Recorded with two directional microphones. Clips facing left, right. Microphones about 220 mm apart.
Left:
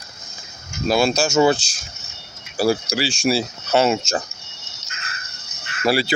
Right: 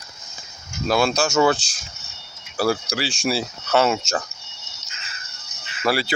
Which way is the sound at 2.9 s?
20° right (ahead or behind).